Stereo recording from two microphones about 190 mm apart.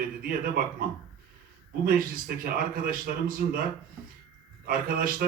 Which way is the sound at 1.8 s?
50° right (ahead or behind).